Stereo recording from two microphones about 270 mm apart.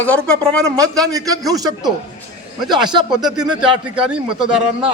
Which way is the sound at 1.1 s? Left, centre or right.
Centre.